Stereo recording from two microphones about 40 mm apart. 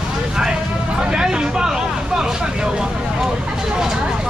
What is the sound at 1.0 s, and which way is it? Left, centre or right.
Speech, centre.